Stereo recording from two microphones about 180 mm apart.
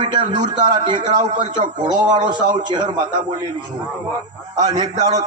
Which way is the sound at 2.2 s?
25° right (ahead or behind).